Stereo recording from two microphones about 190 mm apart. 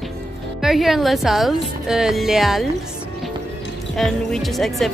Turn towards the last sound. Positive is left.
turn(degrees=0)  # may be behind; listen again after turning